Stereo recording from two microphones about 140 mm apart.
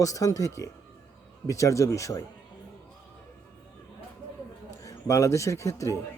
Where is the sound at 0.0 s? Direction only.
25° left (ahead or behind).